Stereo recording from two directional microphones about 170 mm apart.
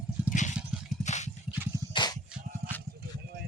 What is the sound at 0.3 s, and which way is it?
Vehicle, 45° left (ahead or behind).